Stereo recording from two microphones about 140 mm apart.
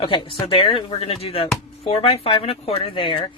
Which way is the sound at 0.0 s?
35° left (ahead or behind).